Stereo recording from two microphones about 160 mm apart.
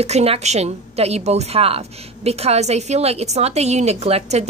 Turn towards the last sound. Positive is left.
turn(degrees=-40)  # may be behind; listen again after turning